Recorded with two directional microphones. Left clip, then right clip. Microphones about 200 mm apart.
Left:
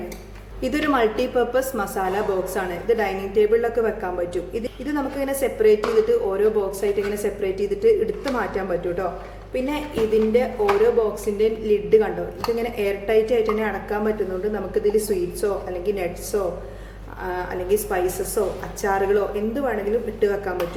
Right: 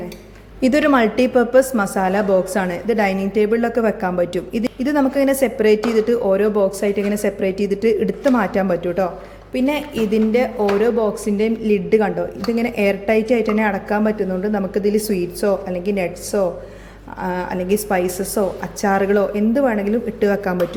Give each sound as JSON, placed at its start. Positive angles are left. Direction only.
{"t": 0.6, "sound": "a woman's voice", "side_deg": -40}